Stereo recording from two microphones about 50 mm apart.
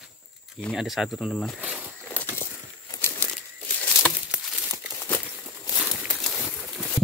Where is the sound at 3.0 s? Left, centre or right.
Left.